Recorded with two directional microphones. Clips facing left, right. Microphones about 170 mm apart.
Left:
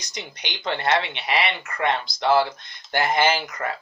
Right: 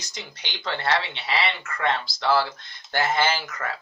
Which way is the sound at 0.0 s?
20° left (ahead or behind).